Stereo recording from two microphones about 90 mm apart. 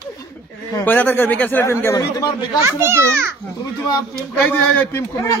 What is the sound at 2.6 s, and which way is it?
Speech, 30° right (ahead or behind).